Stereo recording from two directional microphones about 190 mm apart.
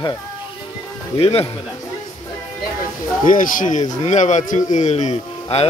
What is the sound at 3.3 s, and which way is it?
A man's voice, 45° left (ahead or behind).